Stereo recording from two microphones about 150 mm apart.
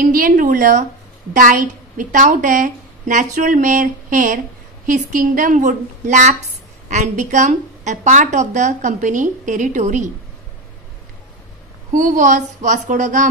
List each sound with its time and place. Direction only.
0.0 s a woman's voice: 65° right (ahead or behind)
11.9 s a woman's voice: 60° right (ahead or behind)